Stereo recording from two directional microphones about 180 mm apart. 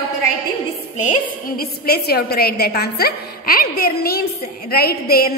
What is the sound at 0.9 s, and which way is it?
A woman's voice, 50° left (ahead or behind).